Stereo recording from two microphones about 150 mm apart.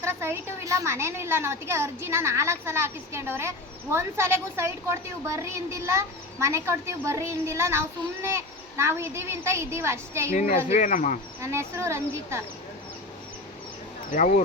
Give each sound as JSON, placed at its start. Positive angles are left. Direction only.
{"t": 0.0, "sound": "a woman's voice", "side_deg": -15}
{"t": 10.3, "sound": "speech", "side_deg": 55}
{"t": 11.3, "sound": "a woman's voice", "side_deg": -20}
{"t": 14.1, "sound": "speech", "side_deg": 55}